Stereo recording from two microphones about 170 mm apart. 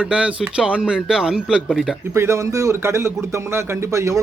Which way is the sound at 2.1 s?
15° right (ahead or behind).